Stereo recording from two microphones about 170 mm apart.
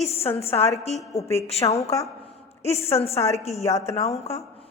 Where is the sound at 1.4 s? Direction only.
35° left (ahead or behind).